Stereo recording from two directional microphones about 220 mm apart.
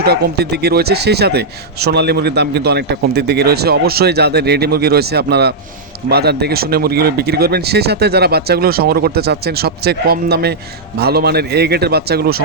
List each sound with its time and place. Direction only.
0.0 s speech: 45° right (ahead or behind)